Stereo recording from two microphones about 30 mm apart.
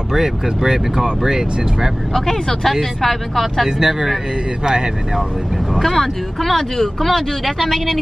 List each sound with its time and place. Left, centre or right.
0.1 s speech: centre
2.1 s speech: centre
3.6 s speech: centre
5.8 s speech: centre